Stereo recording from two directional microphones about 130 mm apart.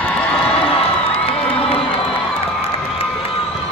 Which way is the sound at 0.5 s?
45° left (ahead or behind).